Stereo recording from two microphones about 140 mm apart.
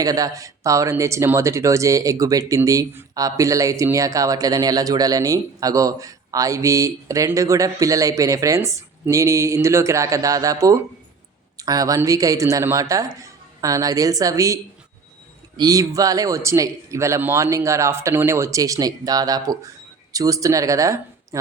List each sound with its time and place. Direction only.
0.0 s speech: 25° right (ahead or behind)